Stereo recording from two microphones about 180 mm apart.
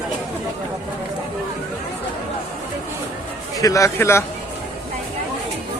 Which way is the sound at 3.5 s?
20° left (ahead or behind).